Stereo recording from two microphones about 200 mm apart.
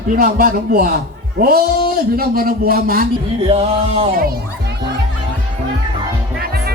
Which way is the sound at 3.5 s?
30° right (ahead or behind).